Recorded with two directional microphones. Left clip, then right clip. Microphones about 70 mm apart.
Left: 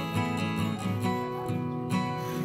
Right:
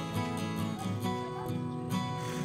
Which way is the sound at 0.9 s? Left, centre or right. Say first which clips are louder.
Left 6 dB; centre.